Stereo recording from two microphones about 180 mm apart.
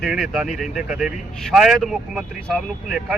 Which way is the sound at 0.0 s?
Centre (ahead or behind).